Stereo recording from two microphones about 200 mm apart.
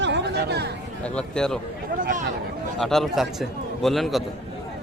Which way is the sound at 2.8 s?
Centre (ahead or behind).